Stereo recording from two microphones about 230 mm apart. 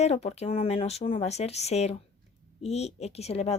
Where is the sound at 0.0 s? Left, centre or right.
Left.